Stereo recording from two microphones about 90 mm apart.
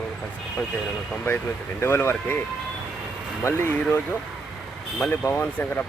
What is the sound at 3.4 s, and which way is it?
Speech, 30° left (ahead or behind).